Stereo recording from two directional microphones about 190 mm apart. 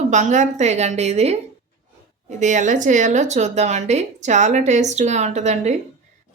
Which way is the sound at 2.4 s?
40° right (ahead or behind).